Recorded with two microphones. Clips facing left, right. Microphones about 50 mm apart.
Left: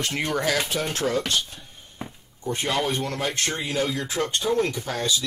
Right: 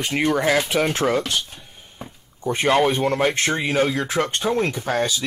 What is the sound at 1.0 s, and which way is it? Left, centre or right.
Speech, right.